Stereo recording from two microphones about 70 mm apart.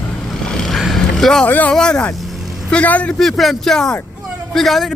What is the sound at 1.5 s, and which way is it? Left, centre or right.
Speech, left.